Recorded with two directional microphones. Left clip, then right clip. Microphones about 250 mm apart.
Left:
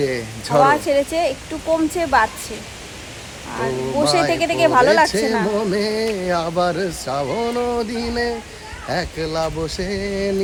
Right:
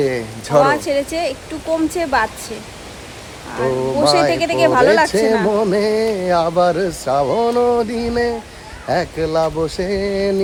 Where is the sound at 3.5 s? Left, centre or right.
Centre.